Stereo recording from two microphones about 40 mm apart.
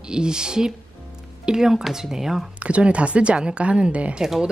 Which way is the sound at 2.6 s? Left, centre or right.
Right.